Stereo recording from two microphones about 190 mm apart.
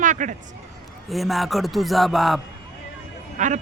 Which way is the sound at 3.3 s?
40° right (ahead or behind).